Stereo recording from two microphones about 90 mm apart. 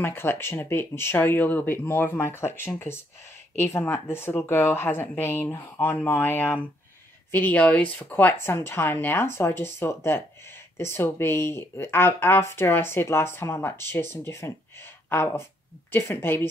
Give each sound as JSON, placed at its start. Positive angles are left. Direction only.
{"t": 0.0, "sound": "a woman's voice", "side_deg": 25}